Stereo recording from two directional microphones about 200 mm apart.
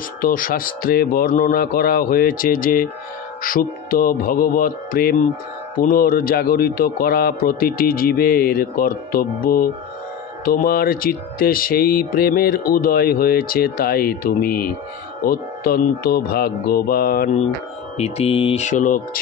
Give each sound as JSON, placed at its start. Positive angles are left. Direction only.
{"t": 0.2, "sound": "speech", "side_deg": 45}
{"t": 17.9, "sound": "speech", "side_deg": 30}